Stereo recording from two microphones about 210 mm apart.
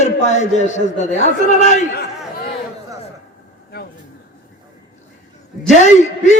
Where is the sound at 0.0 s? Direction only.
35° left (ahead or behind).